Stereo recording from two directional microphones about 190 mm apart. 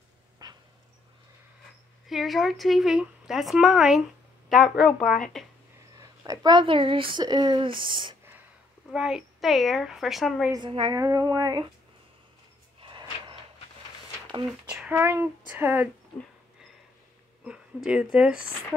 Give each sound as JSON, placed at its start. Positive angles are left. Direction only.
{"t": 0.4, "sound": "dog", "side_deg": -20}
{"t": 2.0, "sound": "speech", "side_deg": 0}
{"t": 5.9, "sound": "speech", "side_deg": -20}
{"t": 8.9, "sound": "speech", "side_deg": -5}
{"t": 10.5, "sound": "speech", "side_deg": -25}
{"t": 12.8, "sound": "a sound", "side_deg": -25}
{"t": 14.7, "sound": "speech", "side_deg": -10}
{"t": 17.5, "sound": "speech", "side_deg": -5}